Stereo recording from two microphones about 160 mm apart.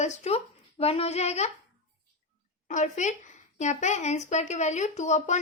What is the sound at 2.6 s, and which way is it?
A woman's voice, 50° left (ahead or behind).